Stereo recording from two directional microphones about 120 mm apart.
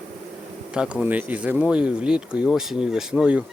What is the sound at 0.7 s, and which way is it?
Speech, 5° right (ahead or behind).